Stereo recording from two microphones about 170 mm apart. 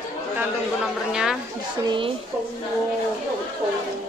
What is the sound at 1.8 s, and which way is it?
Speech, 30° right (ahead or behind).